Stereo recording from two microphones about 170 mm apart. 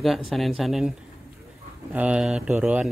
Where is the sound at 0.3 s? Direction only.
Centre (ahead or behind).